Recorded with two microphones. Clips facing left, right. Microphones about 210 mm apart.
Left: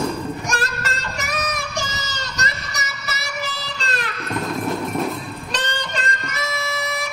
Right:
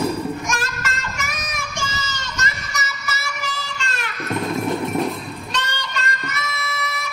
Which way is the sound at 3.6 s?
35° left (ahead or behind).